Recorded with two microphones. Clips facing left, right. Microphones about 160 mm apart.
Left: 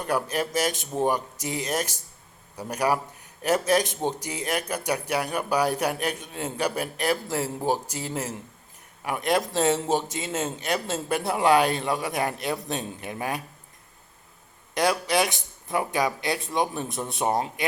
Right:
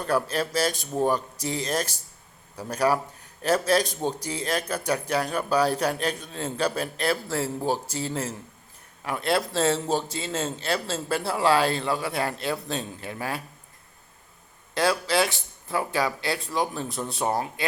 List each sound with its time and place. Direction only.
0.0 s a man's voice: 15° left (ahead or behind)
14.8 s a man's voice: 20° left (ahead or behind)